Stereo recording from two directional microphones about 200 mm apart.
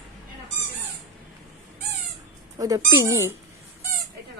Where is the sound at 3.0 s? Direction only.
15° left (ahead or behind).